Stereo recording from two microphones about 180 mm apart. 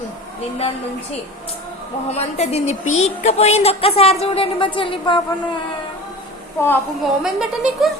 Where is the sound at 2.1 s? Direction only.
35° left (ahead or behind).